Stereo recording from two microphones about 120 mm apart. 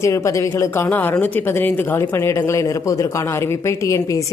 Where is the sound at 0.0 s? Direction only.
25° left (ahead or behind).